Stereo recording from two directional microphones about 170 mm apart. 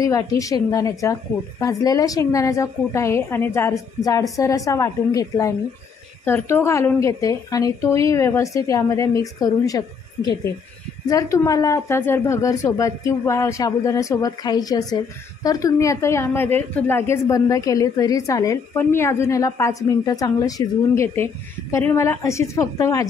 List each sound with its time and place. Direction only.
0.0 s a woman's voice: 20° left (ahead or behind)